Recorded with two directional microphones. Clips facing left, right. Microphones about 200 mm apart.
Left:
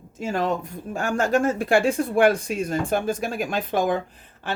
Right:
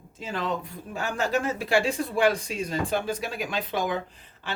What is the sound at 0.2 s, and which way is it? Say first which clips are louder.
Speech: left 6 dB; 50° left (ahead or behind).